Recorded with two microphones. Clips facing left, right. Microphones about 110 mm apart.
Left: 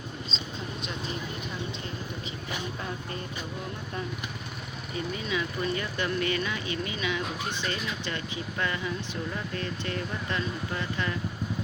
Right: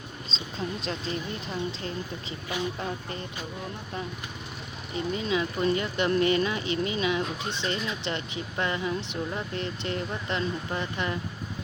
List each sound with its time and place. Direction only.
4.9 s speech: 25° right (ahead or behind)